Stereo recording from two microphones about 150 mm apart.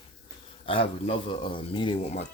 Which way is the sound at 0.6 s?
35° left (ahead or behind).